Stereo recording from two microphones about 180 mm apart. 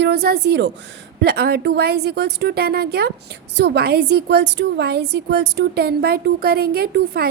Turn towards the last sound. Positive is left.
turn(degrees=-65)  # may be behind; listen again after turning